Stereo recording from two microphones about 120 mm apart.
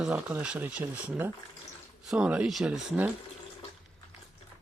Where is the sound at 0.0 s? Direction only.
10° right (ahead or behind).